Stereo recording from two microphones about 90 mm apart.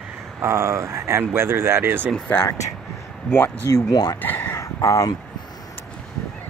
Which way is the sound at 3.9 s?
45° left (ahead or behind).